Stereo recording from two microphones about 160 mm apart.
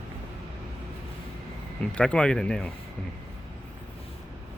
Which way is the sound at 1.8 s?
5° left (ahead or behind).